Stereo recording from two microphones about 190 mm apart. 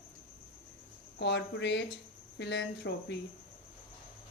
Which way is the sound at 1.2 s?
65° left (ahead or behind).